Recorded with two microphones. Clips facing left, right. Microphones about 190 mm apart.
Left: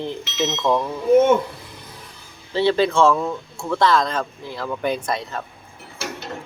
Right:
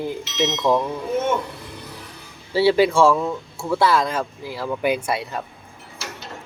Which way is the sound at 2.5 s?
10° right (ahead or behind).